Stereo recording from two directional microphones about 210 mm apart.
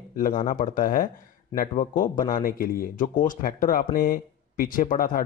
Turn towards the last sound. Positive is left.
turn(degrees=40)  # may be behind; listen again after turning